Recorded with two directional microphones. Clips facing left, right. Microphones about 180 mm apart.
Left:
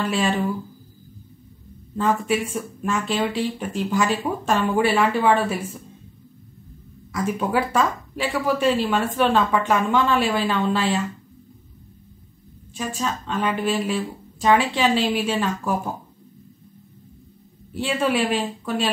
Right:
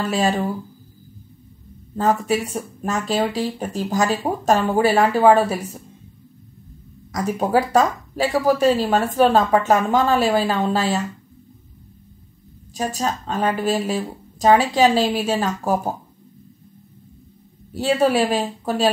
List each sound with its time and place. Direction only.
0.0 s speech: 40° right (ahead or behind)
2.0 s speech: 40° right (ahead or behind)
7.1 s speech: 40° right (ahead or behind)
12.7 s speech: 40° right (ahead or behind)
17.7 s speech: 40° right (ahead or behind)